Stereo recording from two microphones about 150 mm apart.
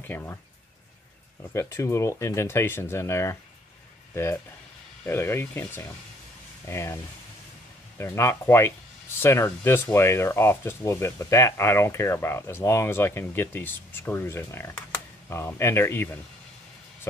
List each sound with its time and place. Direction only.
0.0 s speech: 15° left (ahead or behind)
1.5 s speech: 20° left (ahead or behind)
8.0 s speech: 15° left (ahead or behind)